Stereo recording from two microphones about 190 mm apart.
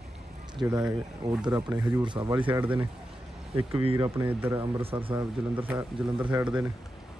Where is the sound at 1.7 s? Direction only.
5° right (ahead or behind).